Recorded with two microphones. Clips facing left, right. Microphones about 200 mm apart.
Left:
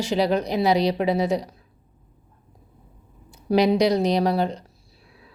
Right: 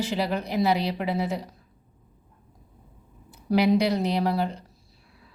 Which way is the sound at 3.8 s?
90° left.